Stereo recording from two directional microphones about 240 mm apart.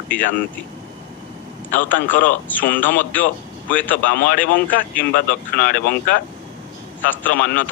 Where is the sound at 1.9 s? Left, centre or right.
Left.